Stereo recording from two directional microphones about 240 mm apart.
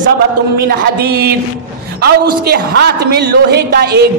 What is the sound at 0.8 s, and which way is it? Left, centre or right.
A man's voice, right.